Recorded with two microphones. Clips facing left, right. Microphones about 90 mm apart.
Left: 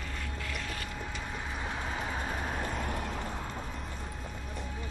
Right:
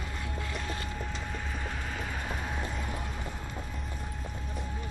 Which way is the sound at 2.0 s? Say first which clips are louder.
Left 1 dB; 30° left (ahead or behind).